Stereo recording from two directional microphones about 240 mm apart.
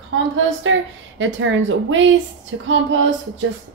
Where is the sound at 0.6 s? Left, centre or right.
Right.